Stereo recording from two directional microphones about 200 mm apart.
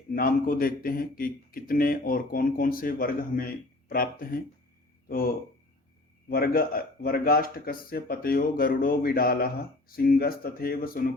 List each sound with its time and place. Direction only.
0.1 s a man's voice: 45° left (ahead or behind)